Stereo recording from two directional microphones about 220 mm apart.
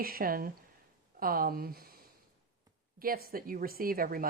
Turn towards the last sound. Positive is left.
turn(degrees=-40)  # may be behind; listen again after turning